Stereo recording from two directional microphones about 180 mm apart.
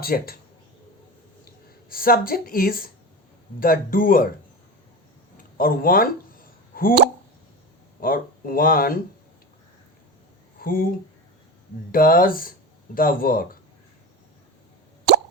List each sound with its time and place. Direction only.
0.0 s speech: 55° left (ahead or behind)
1.9 s a woman's voice: 55° left (ahead or behind)
5.5 s a sound: 55° left (ahead or behind)
8.0 s a woman's voice: 55° left (ahead or behind)
10.6 s speech: 50° left (ahead or behind)
11.9 s speech: 50° left (ahead or behind)